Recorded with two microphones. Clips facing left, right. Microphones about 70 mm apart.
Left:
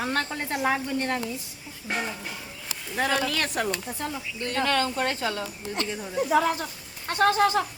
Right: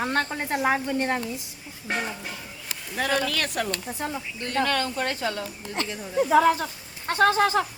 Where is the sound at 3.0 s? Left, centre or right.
Left.